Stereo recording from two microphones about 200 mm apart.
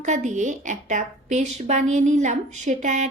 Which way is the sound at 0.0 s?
35° right (ahead or behind).